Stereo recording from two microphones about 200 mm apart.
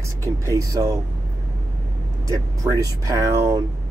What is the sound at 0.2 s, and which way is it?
Speech, 15° right (ahead or behind).